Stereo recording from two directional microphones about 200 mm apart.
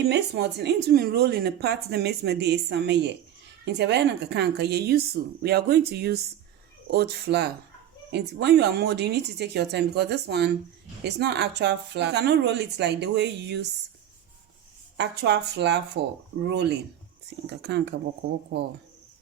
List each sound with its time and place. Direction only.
0.1 s speech: 55° right (ahead or behind)
14.9 s speech: 60° right (ahead or behind)